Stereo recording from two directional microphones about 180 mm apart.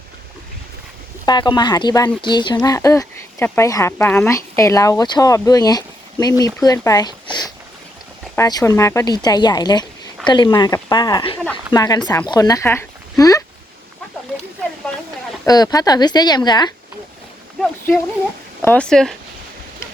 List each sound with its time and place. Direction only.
1.2 s speech: 25° left (ahead or behind)
15.4 s speech: 20° left (ahead or behind)
18.6 s speech: 10° left (ahead or behind)